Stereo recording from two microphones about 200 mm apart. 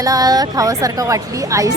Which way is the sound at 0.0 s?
20° right (ahead or behind).